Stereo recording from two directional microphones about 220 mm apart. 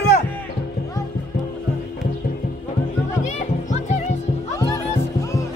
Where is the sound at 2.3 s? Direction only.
45° left (ahead or behind).